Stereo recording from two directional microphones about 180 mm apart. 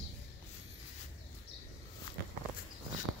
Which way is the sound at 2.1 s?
25° left (ahead or behind).